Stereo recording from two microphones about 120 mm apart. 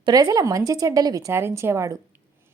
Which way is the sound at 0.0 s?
30° right (ahead or behind).